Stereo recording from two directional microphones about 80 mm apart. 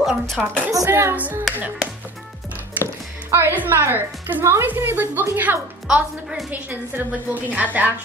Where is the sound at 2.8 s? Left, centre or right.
Right.